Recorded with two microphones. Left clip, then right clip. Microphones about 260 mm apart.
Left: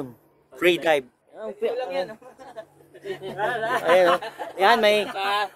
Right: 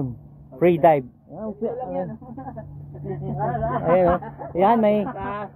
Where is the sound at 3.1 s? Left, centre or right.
Left.